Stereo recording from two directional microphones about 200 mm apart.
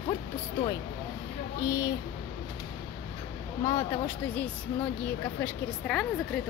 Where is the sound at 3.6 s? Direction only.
10° left (ahead or behind).